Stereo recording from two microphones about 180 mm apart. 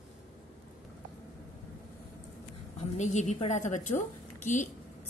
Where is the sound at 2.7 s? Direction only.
40° left (ahead or behind).